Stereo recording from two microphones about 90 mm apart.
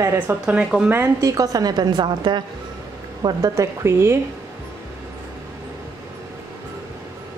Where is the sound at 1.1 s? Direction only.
40° right (ahead or behind).